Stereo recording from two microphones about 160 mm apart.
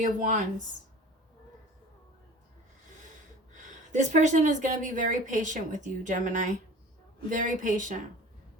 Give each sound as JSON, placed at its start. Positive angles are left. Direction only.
{"t": 0.0, "sound": "a woman's voice", "side_deg": -55}
{"t": 3.5, "sound": "a woman's voice", "side_deg": -50}